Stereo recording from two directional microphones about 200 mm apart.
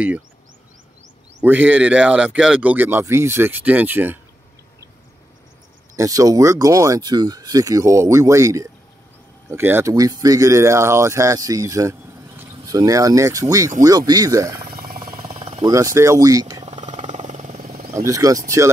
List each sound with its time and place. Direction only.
1.4 s speech: 10° right (ahead or behind)
5.9 s speech: 15° right (ahead or behind)
15.2 s a sound: 30° right (ahead or behind)
15.7 s speech: 15° right (ahead or behind)
16.6 s vehicle: 35° right (ahead or behind)
18.0 s speech: 15° right (ahead or behind)